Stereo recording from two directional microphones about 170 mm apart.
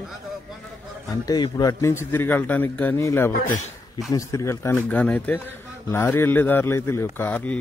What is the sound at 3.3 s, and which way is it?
Speech, 55° left (ahead or behind).